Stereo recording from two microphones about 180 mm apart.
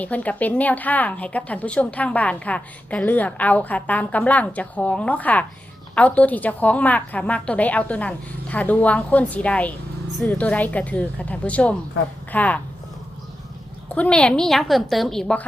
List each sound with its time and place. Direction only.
0.0 s a woman's voice: 10° left (ahead or behind)
13.9 s a woman's voice: 5° left (ahead or behind)